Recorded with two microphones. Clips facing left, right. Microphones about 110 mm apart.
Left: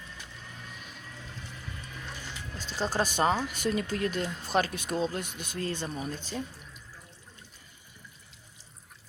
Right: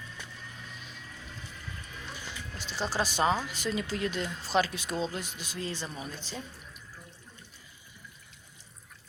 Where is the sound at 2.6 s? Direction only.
40° left (ahead or behind).